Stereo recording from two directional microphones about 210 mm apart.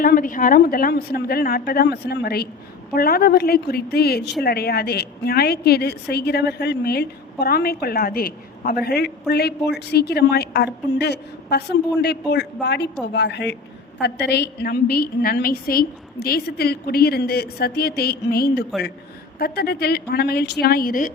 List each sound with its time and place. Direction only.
0.0 s a woman's voice: 40° left (ahead or behind)